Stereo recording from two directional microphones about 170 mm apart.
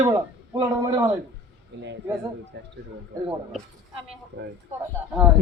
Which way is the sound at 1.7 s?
90° right.